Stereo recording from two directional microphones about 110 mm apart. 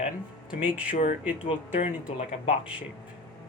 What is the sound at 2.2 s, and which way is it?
Speech, 90° left.